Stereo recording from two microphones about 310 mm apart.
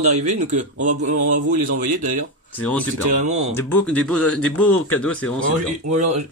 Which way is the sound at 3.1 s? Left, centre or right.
Right.